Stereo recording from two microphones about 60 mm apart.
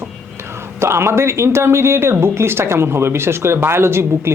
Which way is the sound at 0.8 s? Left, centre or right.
Right.